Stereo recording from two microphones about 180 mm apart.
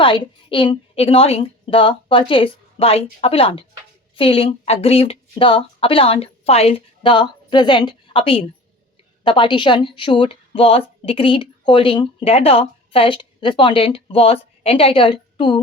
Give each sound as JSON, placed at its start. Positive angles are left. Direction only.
{"t": 0.0, "sound": "a woman's voice", "side_deg": 30}